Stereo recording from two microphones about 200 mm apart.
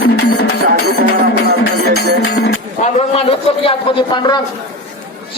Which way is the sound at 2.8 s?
30° left (ahead or behind).